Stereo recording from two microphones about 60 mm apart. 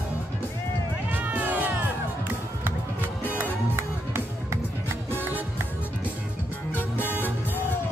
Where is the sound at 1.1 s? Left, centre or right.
Right.